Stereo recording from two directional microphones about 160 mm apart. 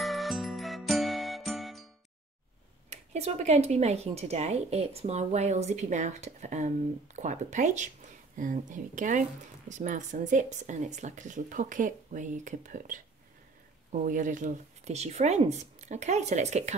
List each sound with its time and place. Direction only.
0.0 s music: centre (ahead or behind)
2.9 s speech: 45° right (ahead or behind)
14.0 s speech: 55° right (ahead or behind)